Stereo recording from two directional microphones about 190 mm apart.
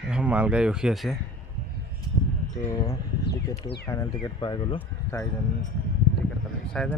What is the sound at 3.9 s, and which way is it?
Speech, 20° left (ahead or behind).